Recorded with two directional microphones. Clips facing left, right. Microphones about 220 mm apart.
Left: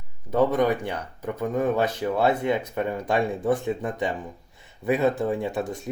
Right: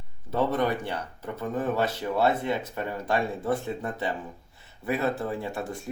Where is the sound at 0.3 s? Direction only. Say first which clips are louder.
Left 4 dB; 15° left (ahead or behind).